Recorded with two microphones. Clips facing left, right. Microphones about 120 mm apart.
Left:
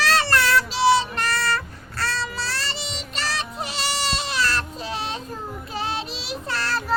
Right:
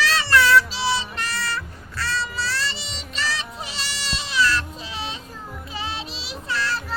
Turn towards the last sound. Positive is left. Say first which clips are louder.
# even
turn(degrees=50)  # may be behind; listen again after turning